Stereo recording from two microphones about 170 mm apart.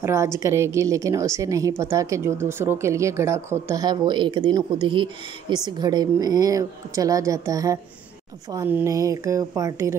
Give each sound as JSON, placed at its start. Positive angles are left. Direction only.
{"t": 0.0, "sound": "a woman's voice", "side_deg": -15}